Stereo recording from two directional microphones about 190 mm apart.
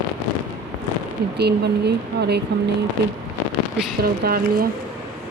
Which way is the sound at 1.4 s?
60° right (ahead or behind).